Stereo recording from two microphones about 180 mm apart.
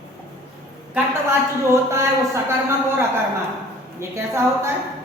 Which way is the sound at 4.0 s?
15° right (ahead or behind).